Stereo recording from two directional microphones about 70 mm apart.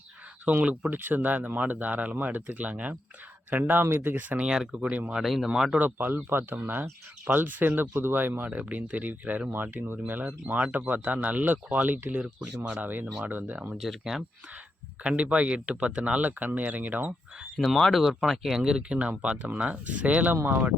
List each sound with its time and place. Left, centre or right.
0.4 s speech: right
3.6 s speech: right
5.2 s speech: centre
5.8 s speech: right
12.2 s speech: centre
12.8 s speech: right
13.8 s speech: centre
15.0 s speech: centre
17.6 s speech: centre; by 20.6 s right